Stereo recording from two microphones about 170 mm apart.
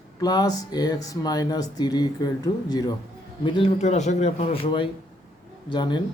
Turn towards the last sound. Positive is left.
turn(degrees=25)  # may be behind; listen again after turning